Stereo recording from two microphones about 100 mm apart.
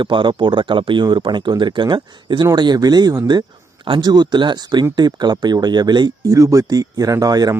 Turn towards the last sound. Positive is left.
turn(degrees=-40)  # may be behind; listen again after turning